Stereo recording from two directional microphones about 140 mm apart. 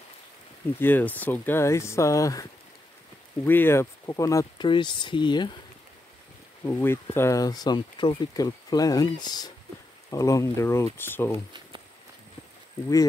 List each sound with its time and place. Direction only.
0.7 s speech: 15° left (ahead or behind)
3.4 s speech: 15° left (ahead or behind)
4.6 s speech: 35° left (ahead or behind)
6.6 s speech: 20° left (ahead or behind)